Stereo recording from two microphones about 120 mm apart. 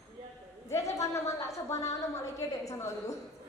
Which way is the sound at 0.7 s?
25° left (ahead or behind).